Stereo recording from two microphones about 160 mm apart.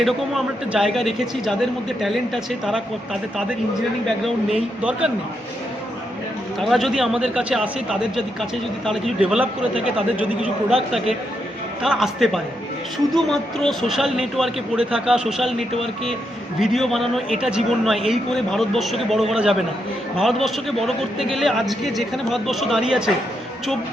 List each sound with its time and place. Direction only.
0.0 s a man's voice: centre (ahead or behind)
4.8 s a man's voice: 5° right (ahead or behind)
6.6 s a man's voice: centre (ahead or behind)
11.8 s a man's voice: centre (ahead or behind)